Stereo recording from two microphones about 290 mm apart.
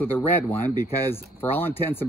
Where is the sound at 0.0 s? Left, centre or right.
Centre.